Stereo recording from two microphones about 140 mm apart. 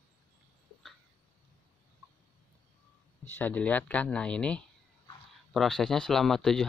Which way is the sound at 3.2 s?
15° left (ahead or behind).